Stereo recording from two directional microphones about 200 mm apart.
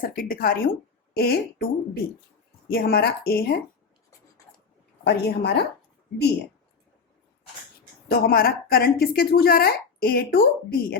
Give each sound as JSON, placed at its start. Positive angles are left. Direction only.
{"t": 0.0, "sound": "a woman's voice", "side_deg": 45}
{"t": 5.0, "sound": "a woman's voice", "side_deg": 55}
{"t": 8.0, "sound": "a woman's voice", "side_deg": 50}